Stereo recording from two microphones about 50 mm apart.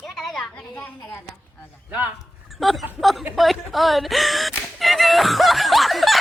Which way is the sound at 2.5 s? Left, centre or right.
Centre.